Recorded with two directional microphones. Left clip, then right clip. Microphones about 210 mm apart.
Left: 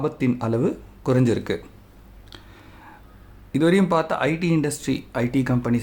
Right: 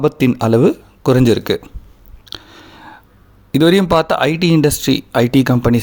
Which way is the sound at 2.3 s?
35° right (ahead or behind).